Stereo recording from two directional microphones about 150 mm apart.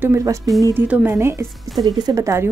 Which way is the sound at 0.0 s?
20° right (ahead or behind).